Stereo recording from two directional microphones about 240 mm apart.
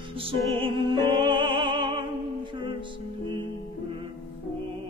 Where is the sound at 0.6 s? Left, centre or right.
Centre.